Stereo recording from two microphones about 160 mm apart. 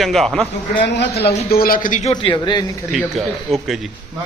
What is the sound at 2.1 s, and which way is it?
Speech, 30° left (ahead or behind).